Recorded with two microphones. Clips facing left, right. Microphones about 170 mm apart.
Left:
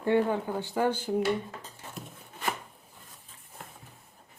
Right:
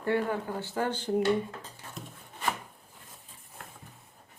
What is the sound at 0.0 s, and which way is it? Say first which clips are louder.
Speech: left 3 dB; 20° left (ahead or behind).